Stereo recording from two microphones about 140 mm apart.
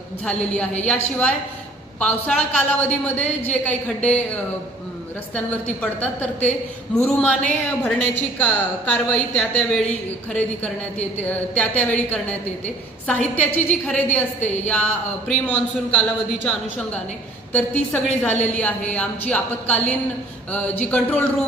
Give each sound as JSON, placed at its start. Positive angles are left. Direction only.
{"t": 0.3, "sound": "a woman's voice", "side_deg": 10}
{"t": 5.3, "sound": "a woman's voice", "side_deg": 10}